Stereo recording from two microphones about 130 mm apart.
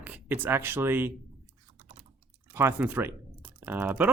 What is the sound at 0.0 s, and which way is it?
Speech, 15° right (ahead or behind).